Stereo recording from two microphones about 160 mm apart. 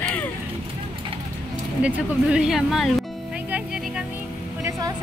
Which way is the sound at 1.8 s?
5° right (ahead or behind).